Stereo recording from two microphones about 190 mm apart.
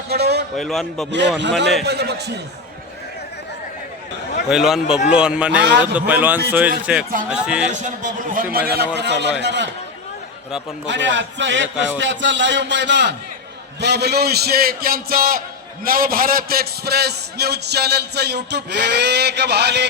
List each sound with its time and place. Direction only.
0.1 s a sound: 60° right (ahead or behind)
0.5 s a man's voice: centre (ahead or behind)
1.4 s a man's voice: 65° right (ahead or behind)
4.4 s a man's voice: centre (ahead or behind)
7.9 s a man's voice: 45° right (ahead or behind)
8.5 s a man's voice: 55° right (ahead or behind)
10.8 s a man's voice: 70° right (ahead or behind)